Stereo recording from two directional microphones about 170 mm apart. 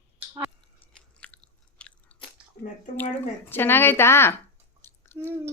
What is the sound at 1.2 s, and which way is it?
Chewing, 10° left (ahead or behind).